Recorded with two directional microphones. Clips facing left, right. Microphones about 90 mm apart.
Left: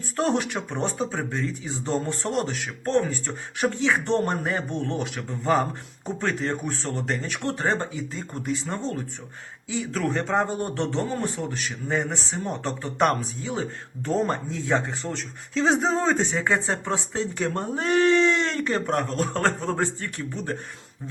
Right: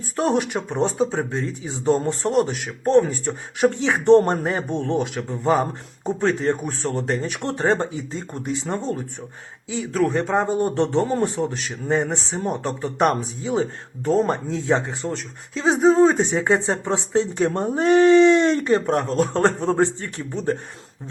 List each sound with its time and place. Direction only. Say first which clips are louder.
0.2 s speech: right 3 dB; 20° right (ahead or behind)
6.1 s speech: right 6 dB; 25° right (ahead or behind)
12.6 s speech: right 2 dB; 20° right (ahead or behind)
15.5 s speech: right 6 dB; 10° right (ahead or behind); by 20.6 s 25° right (ahead or behind)